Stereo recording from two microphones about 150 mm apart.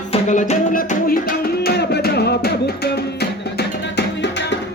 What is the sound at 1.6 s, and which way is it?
Music, 90° left.